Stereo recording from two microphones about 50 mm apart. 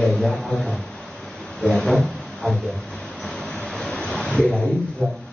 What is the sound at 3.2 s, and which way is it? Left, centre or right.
Vehicle, centre.